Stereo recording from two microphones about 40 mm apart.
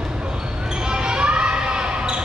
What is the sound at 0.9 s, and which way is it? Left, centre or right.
Basketball bounce, right.